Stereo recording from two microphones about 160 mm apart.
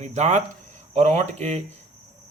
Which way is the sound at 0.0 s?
45° right (ahead or behind).